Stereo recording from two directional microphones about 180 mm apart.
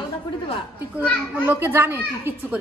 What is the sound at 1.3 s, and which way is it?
A woman's voice, 10° right (ahead or behind).